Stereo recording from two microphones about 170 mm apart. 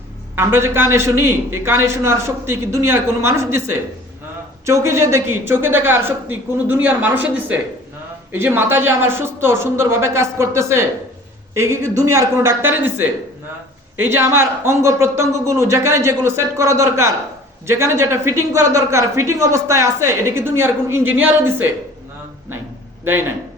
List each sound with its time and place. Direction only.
0.3 s speech: 15° right (ahead or behind)
23.1 s speech: 15° right (ahead or behind)